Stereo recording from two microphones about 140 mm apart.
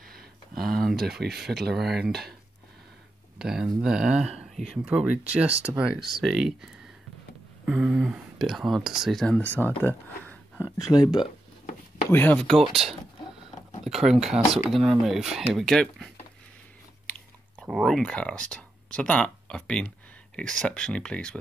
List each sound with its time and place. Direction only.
0.1 s a sound: 90° right
0.7 s speech: centre (ahead or behind)
3.3 s speech: 5° right (ahead or behind); by 10.7 s 15° left (ahead or behind)
10.9 s speech: 30° left (ahead or behind)
12.1 s speech: 15° left (ahead or behind)
17.0 s biting: 10° left (ahead or behind)
17.6 s speech: centre (ahead or behind)